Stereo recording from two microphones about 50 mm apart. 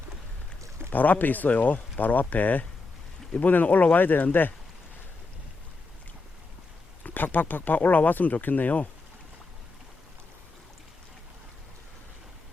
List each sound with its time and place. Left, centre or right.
0.9 s speech: left
7.0 s speech: left